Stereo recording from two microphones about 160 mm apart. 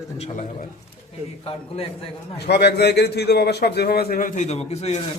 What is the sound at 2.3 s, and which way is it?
A man's voice, 90° left.